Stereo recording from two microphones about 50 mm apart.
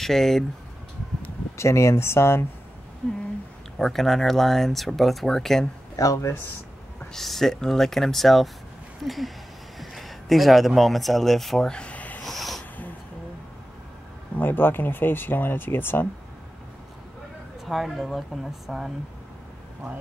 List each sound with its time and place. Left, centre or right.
0.0 s speech: centre
1.6 s speech: left
3.0 s speech: centre
7.2 s speech: centre; by 12.2 s left
12.2 s a sound: centre
14.4 s speech: left
17.6 s speech: centre